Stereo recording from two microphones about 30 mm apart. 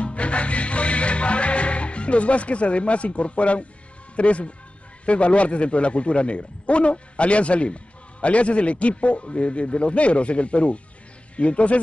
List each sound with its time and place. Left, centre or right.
0.0 s music: left
4.2 s a man's voice: left